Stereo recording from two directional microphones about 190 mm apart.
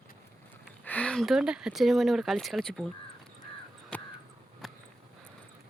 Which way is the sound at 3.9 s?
5° left (ahead or behind).